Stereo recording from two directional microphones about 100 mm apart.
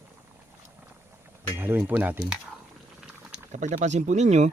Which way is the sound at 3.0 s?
10° right (ahead or behind).